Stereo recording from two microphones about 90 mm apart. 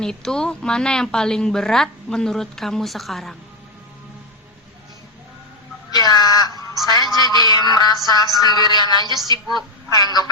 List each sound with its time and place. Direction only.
0.0 s a woman's voice: 5° left (ahead or behind)
5.9 s a sound: 50° left (ahead or behind)
7.1 s music: 50° left (ahead or behind)
8.1 s a woman's voice: 50° left (ahead or behind)